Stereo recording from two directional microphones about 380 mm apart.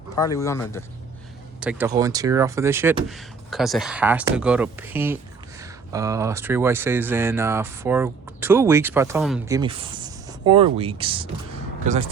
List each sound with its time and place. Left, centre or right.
0.2 s speech: centre
1.6 s speech: centre